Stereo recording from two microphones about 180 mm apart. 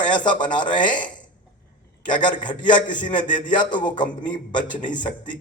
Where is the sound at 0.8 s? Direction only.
45° left (ahead or behind).